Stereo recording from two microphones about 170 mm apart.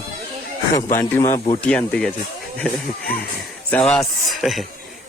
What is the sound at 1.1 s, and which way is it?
Speech, 15° left (ahead or behind).